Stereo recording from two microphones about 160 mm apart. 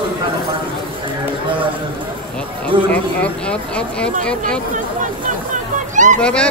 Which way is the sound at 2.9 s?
5° left (ahead or behind).